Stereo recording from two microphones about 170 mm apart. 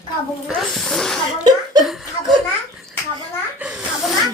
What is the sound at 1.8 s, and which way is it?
Chuckle, centre (ahead or behind).